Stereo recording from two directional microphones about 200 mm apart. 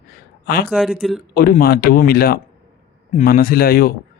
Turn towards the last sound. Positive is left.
turn(degrees=45)  # may be behind; listen again after turning